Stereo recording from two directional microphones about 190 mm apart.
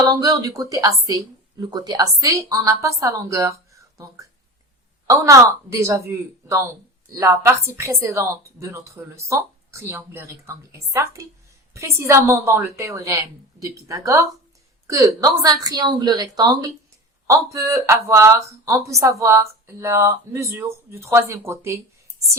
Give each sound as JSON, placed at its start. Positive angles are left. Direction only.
{"t": 0.0, "sound": "a woman's voice", "side_deg": -15}